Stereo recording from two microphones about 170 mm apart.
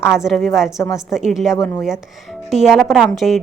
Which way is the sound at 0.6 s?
20° left (ahead or behind).